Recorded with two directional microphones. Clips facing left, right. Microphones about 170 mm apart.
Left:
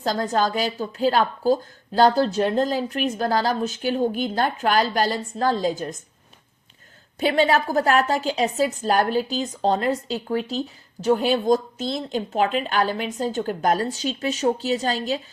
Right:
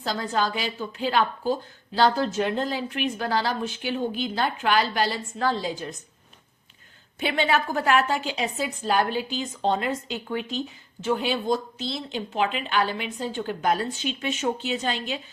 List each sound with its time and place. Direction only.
0.0 s a woman's voice: 45° left (ahead or behind)
7.2 s speech: 40° left (ahead or behind)